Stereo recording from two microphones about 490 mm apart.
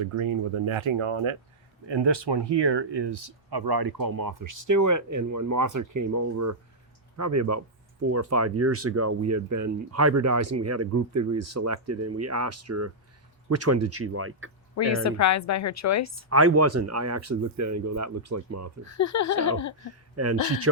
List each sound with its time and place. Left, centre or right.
0.0 s speech: right
1.9 s speech: right
14.8 s a woman's voice: left
16.3 s speech: right
18.9 s a woman's voice: left
20.1 s speech: right